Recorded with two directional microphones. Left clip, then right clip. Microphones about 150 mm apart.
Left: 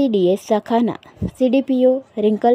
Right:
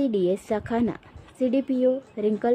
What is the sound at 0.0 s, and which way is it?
Speech, 30° left (ahead or behind).